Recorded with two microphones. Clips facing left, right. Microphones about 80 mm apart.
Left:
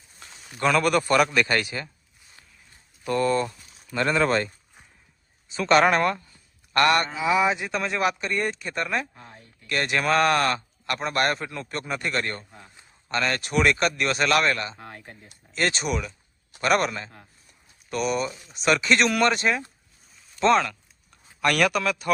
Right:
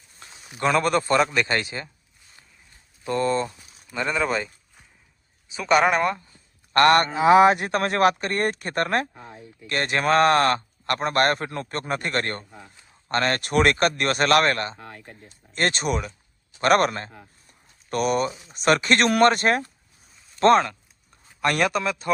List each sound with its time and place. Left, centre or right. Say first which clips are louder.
0.2 s a sound: right 1 dB; centre
0.6 s a man's voice: even; right
3.0 s speech: even; right
3.9 s speech: left 2 dB; centre
6.3 s a sound: right 3 dB; right
7.2 s speech: right 7 dB; right
9.2 s speech: right 5 dB; centre
9.6 s a man's voice: right 2 dB; right
14.8 s speech: even; centre
15.5 s a man's voice: right 2 dB; right
18.3 s speech: right 3 dB; centre
18.5 s speech: right 1 dB; right
21.4 s a man's voice: even; right